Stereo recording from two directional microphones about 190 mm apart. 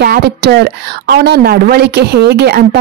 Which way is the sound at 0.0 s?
55° right (ahead or behind).